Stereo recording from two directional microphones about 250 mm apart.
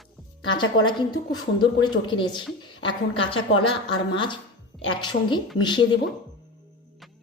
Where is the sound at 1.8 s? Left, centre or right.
Centre.